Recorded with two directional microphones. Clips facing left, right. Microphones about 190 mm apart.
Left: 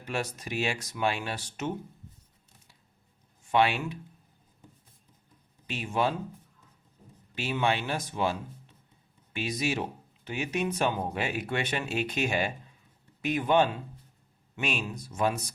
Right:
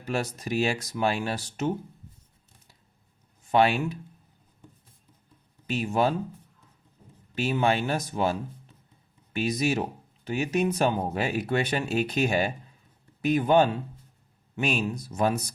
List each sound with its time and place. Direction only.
0.0 s speech: 35° right (ahead or behind)
3.5 s speech: 40° right (ahead or behind)
5.6 s speech: 40° right (ahead or behind)
7.3 s speech: 45° right (ahead or behind)